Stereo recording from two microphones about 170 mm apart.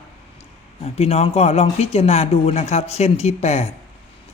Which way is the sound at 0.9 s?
40° left (ahead or behind).